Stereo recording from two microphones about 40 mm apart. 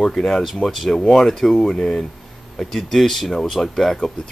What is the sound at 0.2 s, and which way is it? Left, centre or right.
Speech, centre.